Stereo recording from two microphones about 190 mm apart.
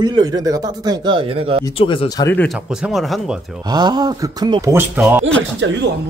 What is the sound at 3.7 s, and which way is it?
Speech, 20° right (ahead or behind).